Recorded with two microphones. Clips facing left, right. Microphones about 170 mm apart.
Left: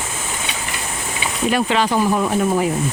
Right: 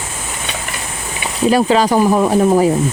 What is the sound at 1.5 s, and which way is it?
Speech, 35° right (ahead or behind).